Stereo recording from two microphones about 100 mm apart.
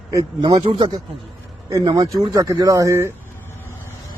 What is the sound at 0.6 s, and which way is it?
Speech, 60° right (ahead or behind).